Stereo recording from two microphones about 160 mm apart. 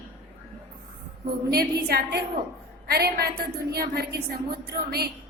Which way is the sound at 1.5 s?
80° right.